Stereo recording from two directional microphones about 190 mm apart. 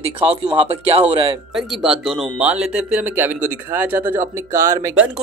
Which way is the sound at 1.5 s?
Centre (ahead or behind).